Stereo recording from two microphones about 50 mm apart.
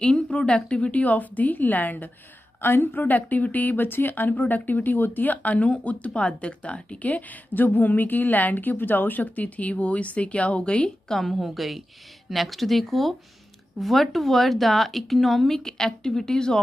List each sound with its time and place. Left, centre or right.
0.0 s a woman's voice: left
11.1 s speech: centre